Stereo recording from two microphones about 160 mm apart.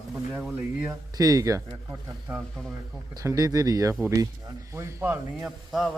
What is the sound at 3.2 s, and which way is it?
A man's voice, 20° right (ahead or behind).